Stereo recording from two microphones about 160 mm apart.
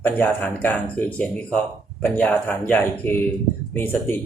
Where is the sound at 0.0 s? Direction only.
10° left (ahead or behind).